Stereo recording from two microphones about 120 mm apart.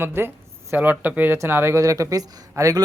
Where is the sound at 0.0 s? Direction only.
20° right (ahead or behind).